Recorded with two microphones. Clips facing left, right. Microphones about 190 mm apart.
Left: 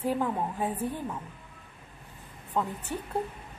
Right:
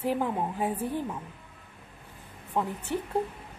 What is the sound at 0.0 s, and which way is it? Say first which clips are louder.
A woman's voice: even; 15° right (ahead or behind).